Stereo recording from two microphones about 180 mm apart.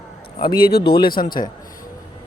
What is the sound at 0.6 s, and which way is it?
Speech, 60° left (ahead or behind).